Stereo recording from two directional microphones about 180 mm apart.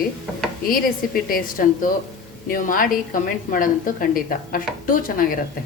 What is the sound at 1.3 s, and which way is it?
Speech, 50° left (ahead or behind).